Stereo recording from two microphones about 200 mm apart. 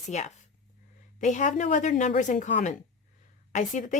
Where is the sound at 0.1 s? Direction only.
35° left (ahead or behind).